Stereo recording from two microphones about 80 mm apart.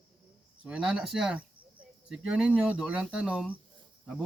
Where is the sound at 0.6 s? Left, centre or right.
Centre.